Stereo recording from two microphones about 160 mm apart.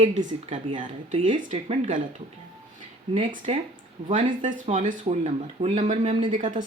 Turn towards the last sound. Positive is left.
turn(degrees=-50)  # may be behind; listen again after turning